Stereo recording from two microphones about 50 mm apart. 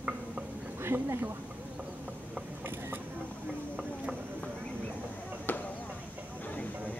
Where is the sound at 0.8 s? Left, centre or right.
Right.